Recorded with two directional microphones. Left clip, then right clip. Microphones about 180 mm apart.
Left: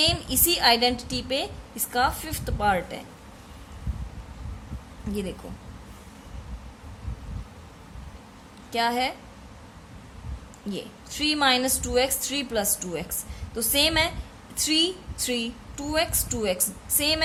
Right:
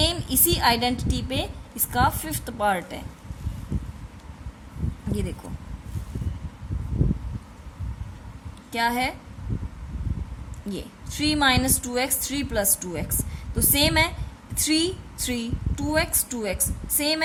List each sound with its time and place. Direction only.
0.0 s a woman's voice: 15° right (ahead or behind)
8.7 s a woman's voice: 15° right (ahead or behind)
10.7 s a woman's voice: 15° right (ahead or behind)